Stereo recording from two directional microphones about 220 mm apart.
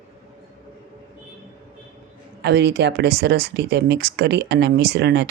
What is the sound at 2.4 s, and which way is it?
Speech, 50° right (ahead or behind).